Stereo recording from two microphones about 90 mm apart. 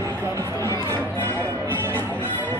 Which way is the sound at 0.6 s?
35° right (ahead or behind).